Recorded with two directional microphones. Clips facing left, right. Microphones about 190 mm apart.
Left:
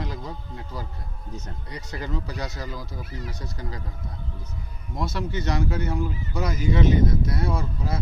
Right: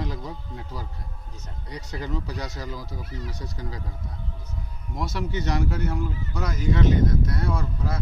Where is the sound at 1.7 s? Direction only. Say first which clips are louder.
Right 1 dB; 5° left (ahead or behind).